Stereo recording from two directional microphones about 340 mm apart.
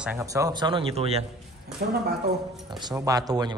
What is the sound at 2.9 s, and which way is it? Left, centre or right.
Speech, centre.